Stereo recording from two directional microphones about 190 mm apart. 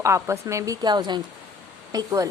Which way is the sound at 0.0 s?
15° right (ahead or behind).